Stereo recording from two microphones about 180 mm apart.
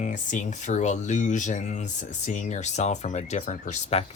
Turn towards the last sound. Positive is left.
turn(degrees=40)  # may be behind; listen again after turning